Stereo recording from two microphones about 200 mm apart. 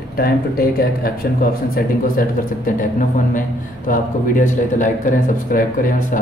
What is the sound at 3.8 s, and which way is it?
Speech, 40° left (ahead or behind).